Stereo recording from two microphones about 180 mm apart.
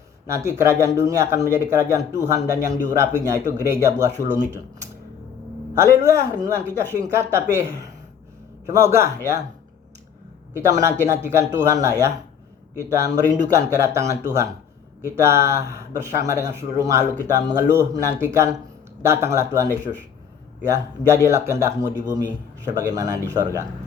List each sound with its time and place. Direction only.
0.3 s a man's voice: 15° right (ahead or behind)
5.8 s a man's voice: 15° right (ahead or behind)
10.7 s a man's voice: 15° right (ahead or behind)